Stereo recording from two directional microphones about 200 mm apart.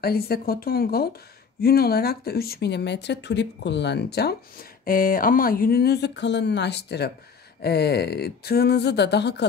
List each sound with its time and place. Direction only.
0.0 s speech: 50° left (ahead or behind)